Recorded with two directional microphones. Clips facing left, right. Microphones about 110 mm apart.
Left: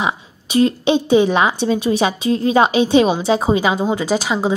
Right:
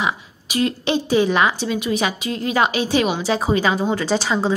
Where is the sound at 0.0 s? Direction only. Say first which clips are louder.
Left 2 dB; 30° left (ahead or behind).